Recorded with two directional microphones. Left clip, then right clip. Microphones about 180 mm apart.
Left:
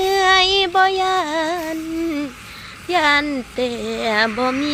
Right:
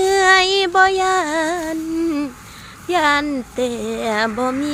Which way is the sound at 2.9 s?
15° right (ahead or behind).